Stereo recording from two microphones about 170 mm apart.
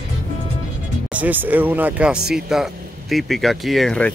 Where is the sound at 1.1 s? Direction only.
10° right (ahead or behind).